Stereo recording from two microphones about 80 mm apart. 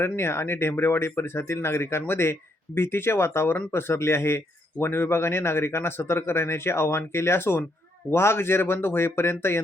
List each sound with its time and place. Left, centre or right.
0.0 s speech: left